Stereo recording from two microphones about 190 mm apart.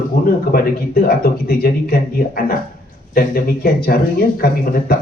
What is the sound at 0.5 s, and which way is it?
Speech, 55° left (ahead or behind).